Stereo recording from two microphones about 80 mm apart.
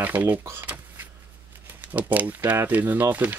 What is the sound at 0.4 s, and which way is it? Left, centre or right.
Speech, right.